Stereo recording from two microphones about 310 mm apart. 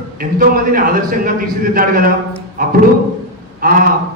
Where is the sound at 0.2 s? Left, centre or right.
Right.